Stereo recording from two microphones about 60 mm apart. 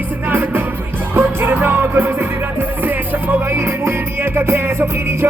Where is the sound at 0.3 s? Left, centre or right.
Right.